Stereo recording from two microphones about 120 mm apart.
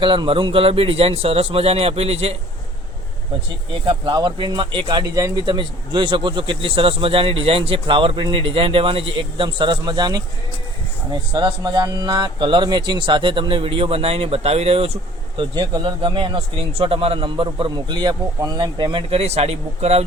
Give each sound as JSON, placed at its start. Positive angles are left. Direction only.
{"t": 0.0, "sound": "a man's voice", "side_deg": -45}
{"t": 3.8, "sound": "speech", "side_deg": -40}
{"t": 5.5, "sound": "speech", "side_deg": -40}
{"t": 15.4, "sound": "speech", "side_deg": -40}
{"t": 19.1, "sound": "a man's voice", "side_deg": -60}